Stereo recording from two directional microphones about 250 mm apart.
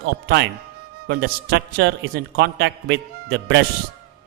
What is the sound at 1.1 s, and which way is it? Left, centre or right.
Speech, right.